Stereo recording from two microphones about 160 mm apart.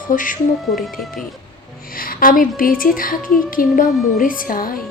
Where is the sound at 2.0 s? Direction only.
65° left (ahead or behind).